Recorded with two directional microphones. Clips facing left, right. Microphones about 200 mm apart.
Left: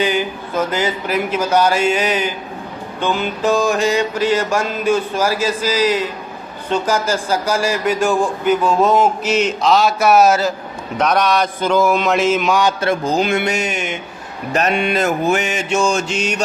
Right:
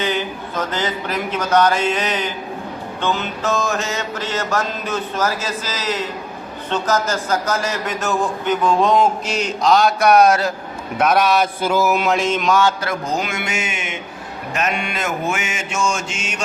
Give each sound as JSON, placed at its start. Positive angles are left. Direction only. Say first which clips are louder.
{"t": 0.0, "sound": "a man's voice", "louder": "left 4 dB", "side_deg": 10}
{"t": 10.9, "sound": "mantra", "louder": "even", "side_deg": -5}
{"t": 12.8, "sound": "mantra", "louder": "left 6 dB", "side_deg": 30}